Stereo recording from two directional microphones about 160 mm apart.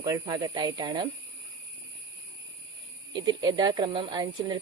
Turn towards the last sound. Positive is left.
turn(degrees=-25)  # may be behind; listen again after turning